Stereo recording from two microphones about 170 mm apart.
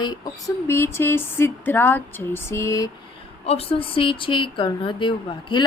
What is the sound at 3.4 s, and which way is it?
A woman's voice, 35° left (ahead or behind).